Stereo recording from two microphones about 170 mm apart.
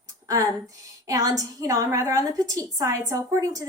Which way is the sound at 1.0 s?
20° right (ahead or behind).